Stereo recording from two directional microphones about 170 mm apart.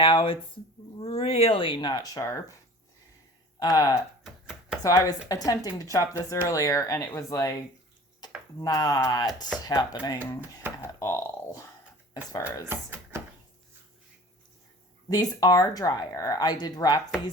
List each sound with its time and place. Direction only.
0.0 s speech: 30° left (ahead or behind)
3.6 s speech: 20° left (ahead or behind)
8.5 s speech: 20° left (ahead or behind)
10.8 s a sound: 15° left (ahead or behind)
12.6 s speech: 10° right (ahead or behind)
15.1 s speech: 20° left (ahead or behind)